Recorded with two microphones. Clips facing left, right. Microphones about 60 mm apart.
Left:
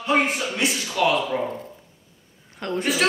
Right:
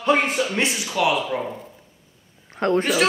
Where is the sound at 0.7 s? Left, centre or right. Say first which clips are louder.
Even; centre.